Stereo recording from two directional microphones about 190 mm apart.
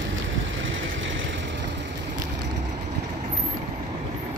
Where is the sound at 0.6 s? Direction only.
80° right.